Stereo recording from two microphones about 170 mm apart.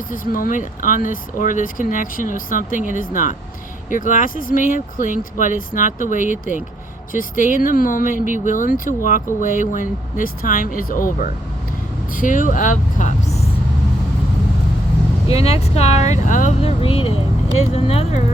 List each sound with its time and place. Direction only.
0.1 s speech: 55° left (ahead or behind)
8.1 s speech: 55° right (ahead or behind)
8.4 s speech: 50° left (ahead or behind)
12.1 s vehicle: 50° left (ahead or behind)
15.3 s speech: 35° left (ahead or behind)
16.6 s speech: 35° left (ahead or behind)